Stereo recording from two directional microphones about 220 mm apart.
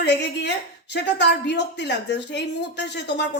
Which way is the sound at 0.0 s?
50° left (ahead or behind).